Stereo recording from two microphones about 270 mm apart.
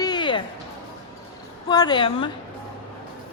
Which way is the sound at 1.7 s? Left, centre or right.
Centre.